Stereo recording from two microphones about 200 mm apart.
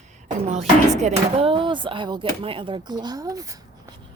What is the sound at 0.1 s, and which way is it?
Speech, 35° right (ahead or behind).